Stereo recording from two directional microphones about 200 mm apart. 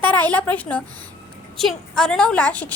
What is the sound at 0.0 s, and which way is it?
A woman's voice, 10° left (ahead or behind).